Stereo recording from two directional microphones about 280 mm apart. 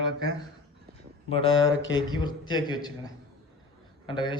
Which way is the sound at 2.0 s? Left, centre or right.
Centre.